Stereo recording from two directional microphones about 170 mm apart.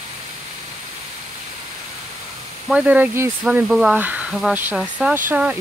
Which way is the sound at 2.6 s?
10° right (ahead or behind).